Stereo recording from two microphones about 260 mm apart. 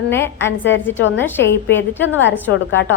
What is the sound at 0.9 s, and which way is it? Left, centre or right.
Speech, left.